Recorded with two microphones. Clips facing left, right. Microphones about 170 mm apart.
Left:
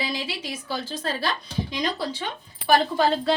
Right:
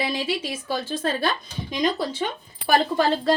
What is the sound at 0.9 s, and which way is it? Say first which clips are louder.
A woman's voice: right 4 dB; 50° right (ahead or behind).